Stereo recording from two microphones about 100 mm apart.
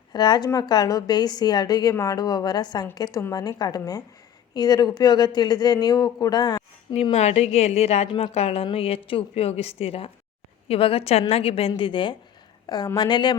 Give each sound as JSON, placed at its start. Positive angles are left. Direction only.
{"t": 0.1, "sound": "a woman's voice", "side_deg": 45}
{"t": 6.9, "sound": "a woman's voice", "side_deg": 90}
{"t": 11.8, "sound": "speech", "side_deg": 55}
{"t": 12.6, "sound": "speech", "side_deg": 40}